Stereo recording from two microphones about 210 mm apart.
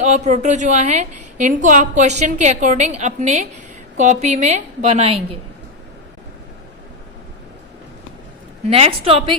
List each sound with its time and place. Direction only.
0.0 s a woman's voice: 35° right (ahead or behind)
8.7 s a woman's voice: 30° right (ahead or behind)